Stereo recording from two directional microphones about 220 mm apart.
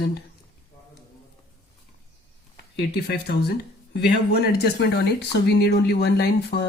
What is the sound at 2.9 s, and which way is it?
Speech, 45° left (ahead or behind).